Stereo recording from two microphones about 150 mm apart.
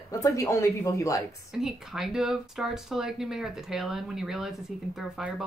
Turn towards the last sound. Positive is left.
turn(degrees=-5)  # may be behind; listen again after turning